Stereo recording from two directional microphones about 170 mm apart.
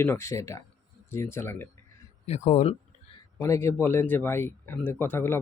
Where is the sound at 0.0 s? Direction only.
15° left (ahead or behind).